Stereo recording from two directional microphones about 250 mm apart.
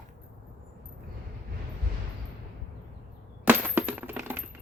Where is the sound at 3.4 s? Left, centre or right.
Centre.